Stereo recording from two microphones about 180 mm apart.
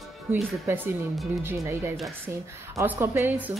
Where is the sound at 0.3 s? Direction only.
10° right (ahead or behind).